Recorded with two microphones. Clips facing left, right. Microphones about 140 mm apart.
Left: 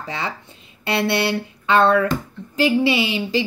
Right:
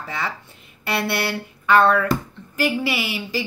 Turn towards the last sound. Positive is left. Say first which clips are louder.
# left 6 dB
turn(degrees=25)  # may be behind; listen again after turning